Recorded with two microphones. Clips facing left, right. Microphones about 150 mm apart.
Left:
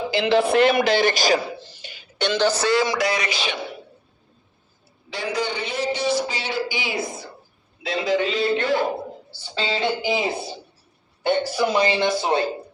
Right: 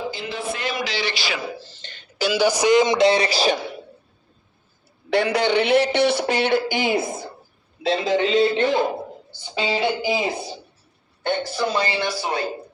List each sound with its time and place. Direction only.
0.1 s speech: 80° left; by 1.4 s 45° left (ahead or behind)
1.5 s throat clearing: 15° left (ahead or behind)
2.1 s speech: 5° right (ahead or behind); by 3.6 s 35° right (ahead or behind)
5.1 s speech: 65° right (ahead or behind)
7.9 s speech: 25° right (ahead or behind)
11.2 s speech: 10° left (ahead or behind)